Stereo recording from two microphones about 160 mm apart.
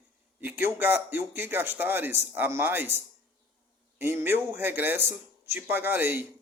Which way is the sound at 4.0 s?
15° right (ahead or behind).